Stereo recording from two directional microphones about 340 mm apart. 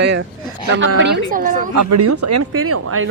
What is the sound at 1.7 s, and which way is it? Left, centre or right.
Speech, right.